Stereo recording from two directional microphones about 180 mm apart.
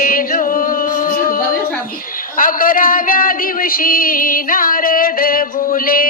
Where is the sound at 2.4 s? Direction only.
50° left (ahead or behind).